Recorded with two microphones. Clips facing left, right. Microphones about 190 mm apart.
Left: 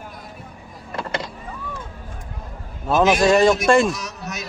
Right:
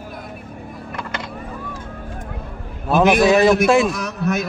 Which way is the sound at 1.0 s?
30° left (ahead or behind).